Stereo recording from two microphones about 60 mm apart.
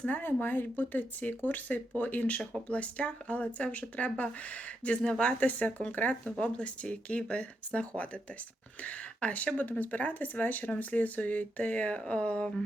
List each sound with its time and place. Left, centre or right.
0.1 s speech: left; by 12.6 s centre